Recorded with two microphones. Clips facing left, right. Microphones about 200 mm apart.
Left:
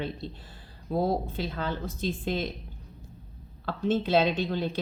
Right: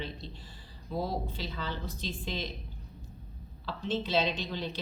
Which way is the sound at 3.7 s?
55° left (ahead or behind).